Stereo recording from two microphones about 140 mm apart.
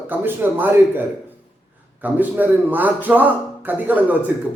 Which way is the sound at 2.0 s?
15° right (ahead or behind).